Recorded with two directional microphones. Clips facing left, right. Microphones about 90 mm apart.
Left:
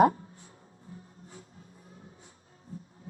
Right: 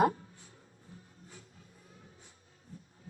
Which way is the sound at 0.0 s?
35° left (ahead or behind).